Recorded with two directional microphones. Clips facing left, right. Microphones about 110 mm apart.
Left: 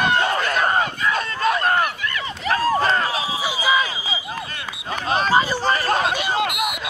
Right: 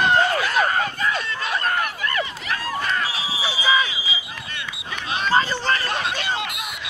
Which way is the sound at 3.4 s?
10° left (ahead or behind).